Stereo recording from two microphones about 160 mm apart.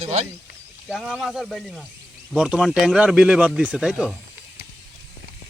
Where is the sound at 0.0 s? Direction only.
45° right (ahead or behind).